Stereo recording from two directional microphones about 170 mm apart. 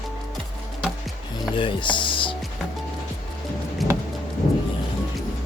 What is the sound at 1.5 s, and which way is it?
Speech, 30° left (ahead or behind).